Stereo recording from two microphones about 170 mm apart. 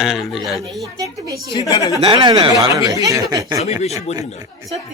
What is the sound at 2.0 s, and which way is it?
A man's voice, 25° right (ahead or behind).